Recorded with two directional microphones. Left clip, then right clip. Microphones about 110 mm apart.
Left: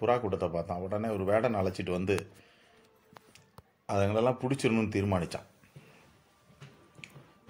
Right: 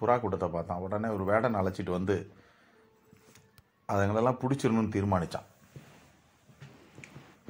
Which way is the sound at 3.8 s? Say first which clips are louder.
Even; 5° left (ahead or behind).